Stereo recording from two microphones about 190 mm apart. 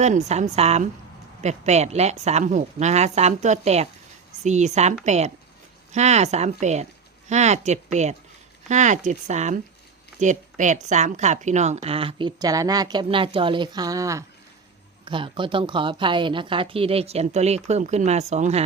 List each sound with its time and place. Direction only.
0.0 s a woman's voice: 35° right (ahead or behind)